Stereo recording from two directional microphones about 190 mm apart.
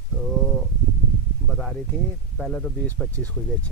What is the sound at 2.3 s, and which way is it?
Speech, centre (ahead or behind).